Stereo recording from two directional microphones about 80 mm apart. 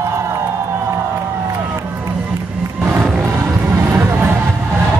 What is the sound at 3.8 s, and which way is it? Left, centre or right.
Music, right.